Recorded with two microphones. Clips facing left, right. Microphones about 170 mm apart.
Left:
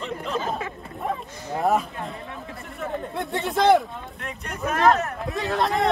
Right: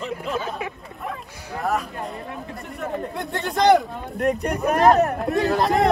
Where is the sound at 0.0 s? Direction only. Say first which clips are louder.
Right 1 dB; 5° right (ahead or behind).